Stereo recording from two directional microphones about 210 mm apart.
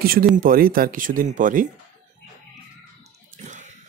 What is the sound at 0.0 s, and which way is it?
Speech, 45° right (ahead or behind).